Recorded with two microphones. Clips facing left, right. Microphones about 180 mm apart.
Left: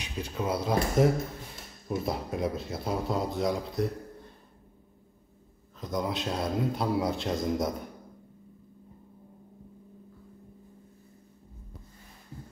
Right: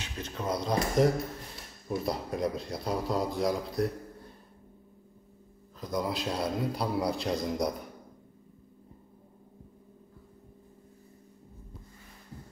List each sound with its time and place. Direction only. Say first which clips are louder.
0.0 s speech: left 3 dB; 10° left (ahead or behind)
5.8 s speech: even; centre (ahead or behind)